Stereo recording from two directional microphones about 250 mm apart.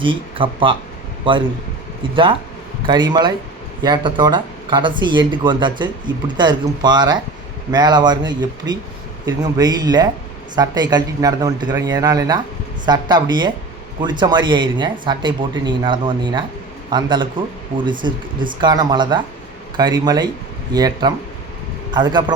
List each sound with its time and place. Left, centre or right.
0.0 s speech: centre
2.8 s speech: centre